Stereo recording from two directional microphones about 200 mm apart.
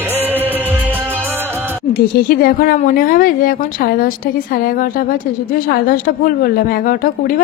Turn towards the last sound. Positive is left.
turn(degrees=45)  # may be behind; listen again after turning